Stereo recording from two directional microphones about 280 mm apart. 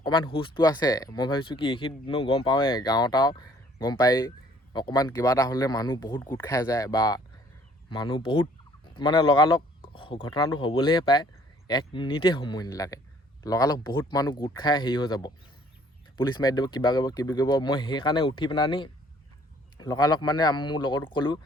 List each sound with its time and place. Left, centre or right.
0.0 s speech: centre